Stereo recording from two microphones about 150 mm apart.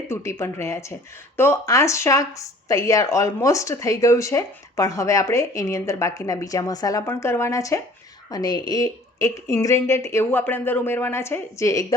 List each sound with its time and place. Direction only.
0.1 s speech: 20° left (ahead or behind)